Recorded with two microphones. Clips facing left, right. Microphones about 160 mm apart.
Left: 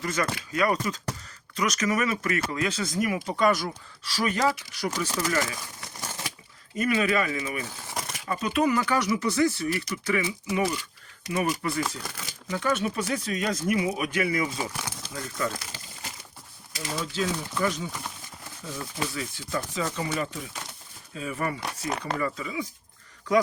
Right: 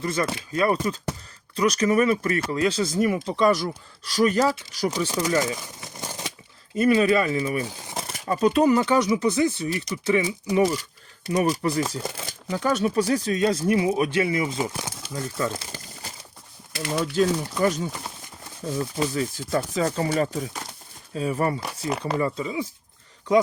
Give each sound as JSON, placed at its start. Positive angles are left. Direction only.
{"t": 0.0, "sound": "speech", "side_deg": -30}
{"t": 4.0, "sound": "speech", "side_deg": -40}
{"t": 4.9, "sound": "speech", "side_deg": -15}
{"t": 6.7, "sound": "speech", "side_deg": -30}
{"t": 7.9, "sound": "crumpling", "side_deg": -30}
{"t": 8.2, "sound": "speech", "side_deg": -35}
{"t": 10.5, "sound": "speech", "side_deg": -35}
{"t": 16.7, "sound": "speech", "side_deg": -65}
{"t": 17.2, "sound": "speech", "side_deg": -40}
{"t": 21.8, "sound": "speech", "side_deg": -5}
{"t": 22.2, "sound": "speech", "side_deg": -30}